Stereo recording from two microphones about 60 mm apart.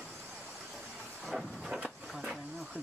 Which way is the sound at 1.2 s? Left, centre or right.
Centre.